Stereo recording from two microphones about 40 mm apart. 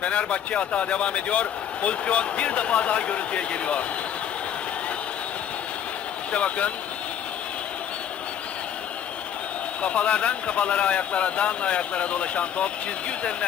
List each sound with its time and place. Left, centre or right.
0.0 s a man's voice: left
6.3 s a man's voice: left
9.8 s a man's voice: left